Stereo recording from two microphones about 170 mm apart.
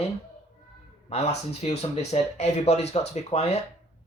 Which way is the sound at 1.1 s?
40° left (ahead or behind).